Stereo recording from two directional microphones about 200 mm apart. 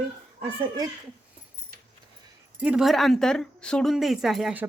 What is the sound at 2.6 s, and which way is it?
A woman's voice, 5° right (ahead or behind).